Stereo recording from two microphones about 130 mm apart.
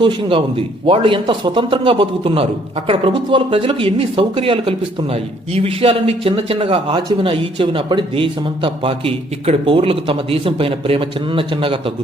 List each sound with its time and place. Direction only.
0.0 s a man's voice: 40° right (ahead or behind)